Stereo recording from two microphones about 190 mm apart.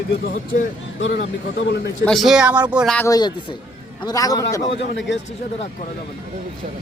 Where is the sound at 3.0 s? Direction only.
20° left (ahead or behind).